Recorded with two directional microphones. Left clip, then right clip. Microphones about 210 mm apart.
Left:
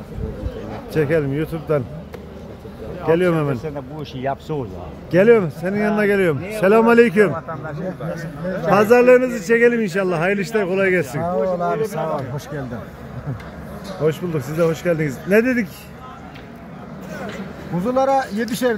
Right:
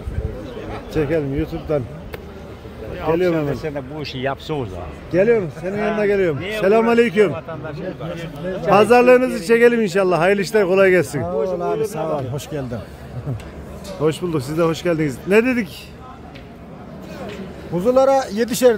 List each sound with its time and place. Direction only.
0.9 s a man's voice: 5° left (ahead or behind)
3.2 s speech: 10° left (ahead or behind)
4.0 s speech: 35° right (ahead or behind)
5.1 s speech: 20° left (ahead or behind); by 7.3 s centre (ahead or behind)
8.6 s a man's voice: 10° right (ahead or behind); by 12.6 s 40° right (ahead or behind)
14.0 s a man's voice: 15° right (ahead or behind)
17.7 s a man's voice: 50° right (ahead or behind)